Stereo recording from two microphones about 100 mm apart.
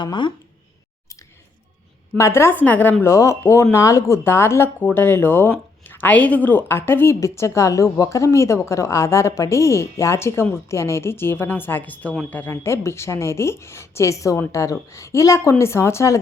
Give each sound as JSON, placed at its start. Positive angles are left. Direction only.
{"t": 0.0, "sound": "speech", "side_deg": 50}
{"t": 2.1, "sound": "speech", "side_deg": 30}
{"t": 3.0, "sound": "speech", "side_deg": 30}